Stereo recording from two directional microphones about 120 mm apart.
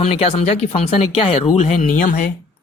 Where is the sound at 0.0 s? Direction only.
55° left (ahead or behind).